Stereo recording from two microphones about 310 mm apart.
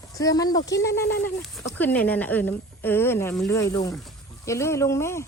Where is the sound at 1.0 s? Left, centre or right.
Left.